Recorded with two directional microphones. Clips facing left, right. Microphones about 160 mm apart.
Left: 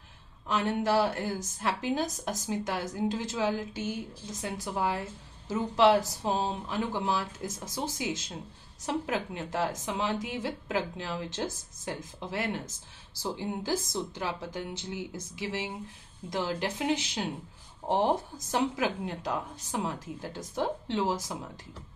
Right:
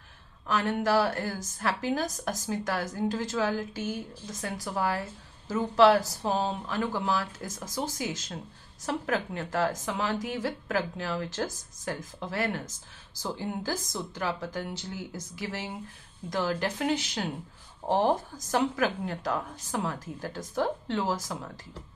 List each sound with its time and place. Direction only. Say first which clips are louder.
0.5 s a woman's voice: right 1 dB; 20° left (ahead or behind)